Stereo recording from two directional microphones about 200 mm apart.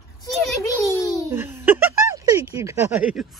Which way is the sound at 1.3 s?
10° right (ahead or behind).